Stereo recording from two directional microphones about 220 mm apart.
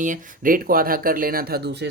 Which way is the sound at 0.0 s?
40° right (ahead or behind).